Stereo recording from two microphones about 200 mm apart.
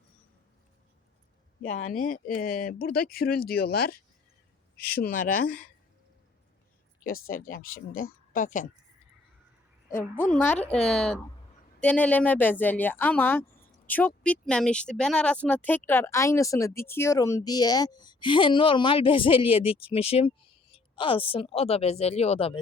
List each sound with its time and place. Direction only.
1.6 s speech: 35° left (ahead or behind); by 3.9 s 50° left (ahead or behind)
4.9 s speech: 45° left (ahead or behind)
7.0 s speech: 45° left (ahead or behind)
10.0 s speech: 5° left (ahead or behind); by 22.5 s 30° left (ahead or behind)